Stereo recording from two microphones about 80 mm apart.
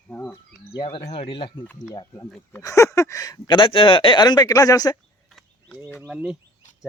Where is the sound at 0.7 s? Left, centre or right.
Left.